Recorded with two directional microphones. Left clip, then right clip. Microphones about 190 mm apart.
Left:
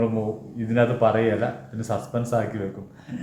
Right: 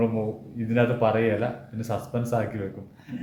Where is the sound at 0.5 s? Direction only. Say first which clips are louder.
Left 2 dB; 15° right (ahead or behind).